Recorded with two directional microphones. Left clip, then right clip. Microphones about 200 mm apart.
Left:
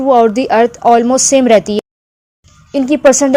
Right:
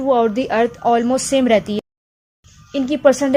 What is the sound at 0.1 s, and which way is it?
A woman's voice, 25° left (ahead or behind).